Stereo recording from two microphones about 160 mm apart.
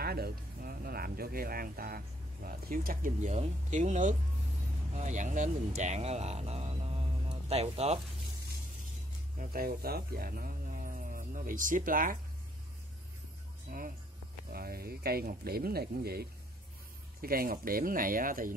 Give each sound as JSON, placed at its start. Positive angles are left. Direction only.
{"t": 0.0, "sound": "speech", "side_deg": -75}
{"t": 9.4, "sound": "speech", "side_deg": -65}
{"t": 13.7, "sound": "speech", "side_deg": -60}
{"t": 14.5, "sound": "speech", "side_deg": -75}
{"t": 17.2, "sound": "speech", "side_deg": -65}